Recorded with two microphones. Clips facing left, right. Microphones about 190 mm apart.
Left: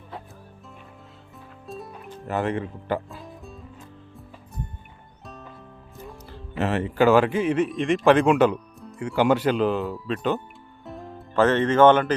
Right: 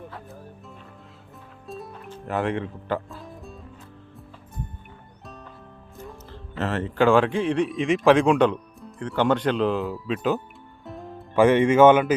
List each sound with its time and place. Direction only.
1.6 s music: centre (ahead or behind)
2.2 s speech: centre (ahead or behind)
2.8 s speech: 15° left (ahead or behind)
5.2 s music: centre (ahead or behind)
6.1 s music: 15° left (ahead or behind)
6.9 s speech: 5° left (ahead or behind)
10.8 s music: centre (ahead or behind)
11.3 s speech: 10° right (ahead or behind)